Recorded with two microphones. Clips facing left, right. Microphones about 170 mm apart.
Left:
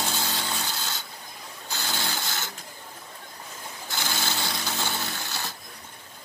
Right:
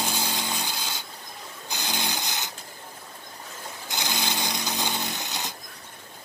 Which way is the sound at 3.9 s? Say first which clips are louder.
Right 1 dB; 15° right (ahead or behind).